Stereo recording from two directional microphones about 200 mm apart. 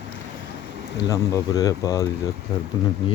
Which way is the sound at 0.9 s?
20° left (ahead or behind).